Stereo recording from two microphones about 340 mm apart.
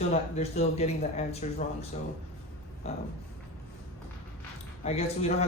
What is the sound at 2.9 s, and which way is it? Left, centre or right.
Speech, centre.